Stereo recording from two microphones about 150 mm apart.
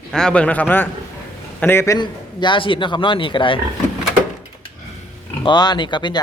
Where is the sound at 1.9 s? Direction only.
30° left (ahead or behind).